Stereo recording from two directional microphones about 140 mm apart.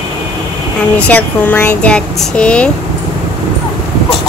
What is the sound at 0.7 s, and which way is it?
Speech, 10° left (ahead or behind).